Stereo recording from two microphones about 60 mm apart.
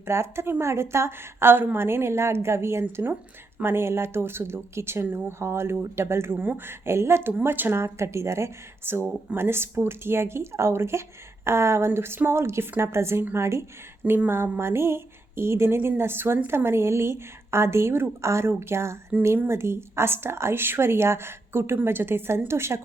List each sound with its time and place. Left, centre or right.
0.0 s speech: right
6.3 s speech: right
7.8 s speech: right